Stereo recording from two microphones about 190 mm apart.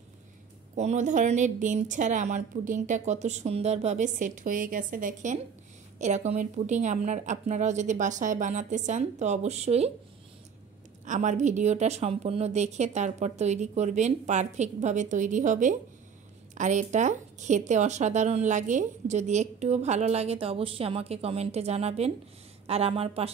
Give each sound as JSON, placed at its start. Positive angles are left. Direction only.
{"t": 0.7, "sound": "a woman's voice", "side_deg": -40}
{"t": 11.1, "sound": "a woman's voice", "side_deg": -40}